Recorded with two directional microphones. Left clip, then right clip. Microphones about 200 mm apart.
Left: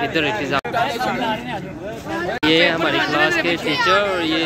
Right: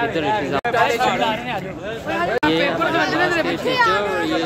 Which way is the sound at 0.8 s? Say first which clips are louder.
Right 3 dB; 10° right (ahead or behind).